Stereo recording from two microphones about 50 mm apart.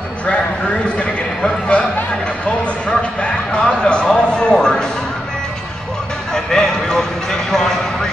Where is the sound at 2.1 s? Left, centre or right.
Left.